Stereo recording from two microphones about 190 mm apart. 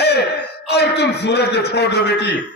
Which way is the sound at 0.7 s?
60° left (ahead or behind).